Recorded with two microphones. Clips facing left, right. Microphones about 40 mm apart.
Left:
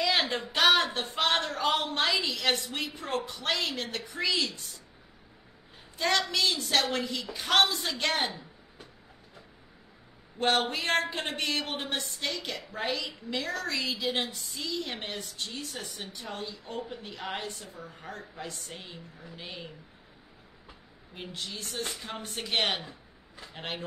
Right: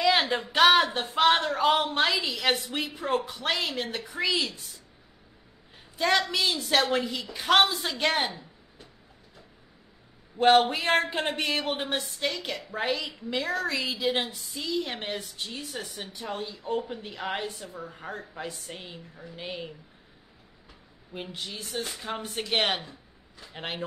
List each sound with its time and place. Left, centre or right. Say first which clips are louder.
0.0 s a woman's voice: right 4 dB; centre
5.9 s a woman's voice: right 3 dB; centre
10.4 s a woman's voice: right 7 dB; centre
21.1 s speech: right 2 dB; centre